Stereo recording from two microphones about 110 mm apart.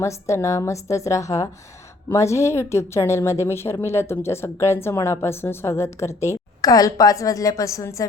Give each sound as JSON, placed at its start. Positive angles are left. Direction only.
{"t": 0.0, "sound": "a woman's voice", "side_deg": 25}